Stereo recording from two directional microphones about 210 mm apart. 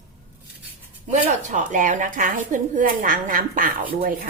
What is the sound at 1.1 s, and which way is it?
Speech, 35° right (ahead or behind).